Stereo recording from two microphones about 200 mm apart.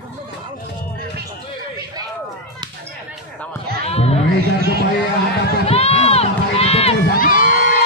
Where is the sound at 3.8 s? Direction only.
30° left (ahead or behind).